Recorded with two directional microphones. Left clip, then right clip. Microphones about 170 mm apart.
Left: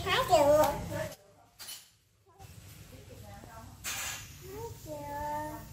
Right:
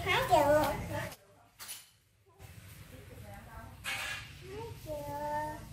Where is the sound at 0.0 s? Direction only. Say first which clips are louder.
Left 2 dB; 25° left (ahead or behind).